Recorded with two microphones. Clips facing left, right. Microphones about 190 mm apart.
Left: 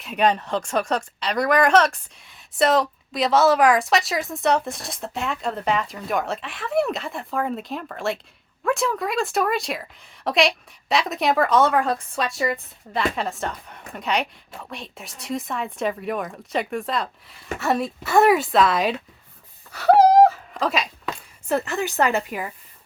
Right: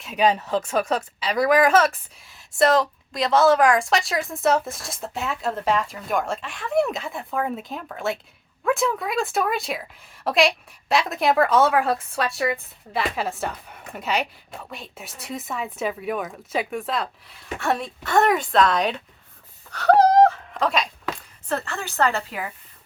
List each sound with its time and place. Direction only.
0.0 s speech: centre (ahead or behind)
19.7 s a sound: 5° left (ahead or behind)
21.5 s a woman's voice: 20° left (ahead or behind)